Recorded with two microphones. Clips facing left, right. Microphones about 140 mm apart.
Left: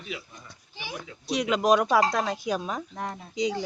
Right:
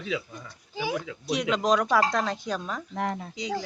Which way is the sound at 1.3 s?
5° left (ahead or behind).